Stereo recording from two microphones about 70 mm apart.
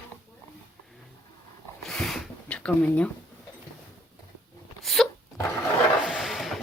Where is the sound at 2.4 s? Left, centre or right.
Centre.